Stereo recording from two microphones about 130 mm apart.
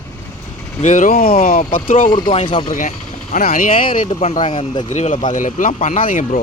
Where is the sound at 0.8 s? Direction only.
85° left.